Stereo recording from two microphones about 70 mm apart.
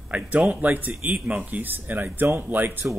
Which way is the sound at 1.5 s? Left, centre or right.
Right.